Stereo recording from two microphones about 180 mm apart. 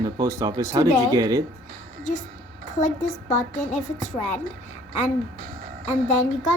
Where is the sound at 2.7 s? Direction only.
45° left (ahead or behind).